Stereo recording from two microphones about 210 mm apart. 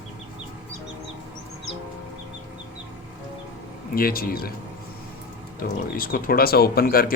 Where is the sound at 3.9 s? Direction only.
45° left (ahead or behind).